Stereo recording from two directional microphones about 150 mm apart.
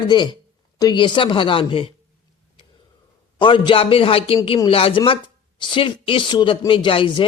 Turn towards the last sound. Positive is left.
turn(degrees=35)  # may be behind; listen again after turning